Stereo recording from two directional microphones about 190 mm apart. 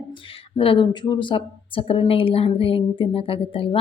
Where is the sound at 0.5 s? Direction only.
30° left (ahead or behind).